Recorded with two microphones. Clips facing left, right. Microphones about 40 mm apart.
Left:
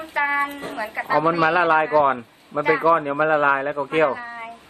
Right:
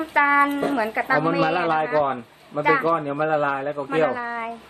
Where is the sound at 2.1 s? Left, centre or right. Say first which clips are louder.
Left 2 dB; centre.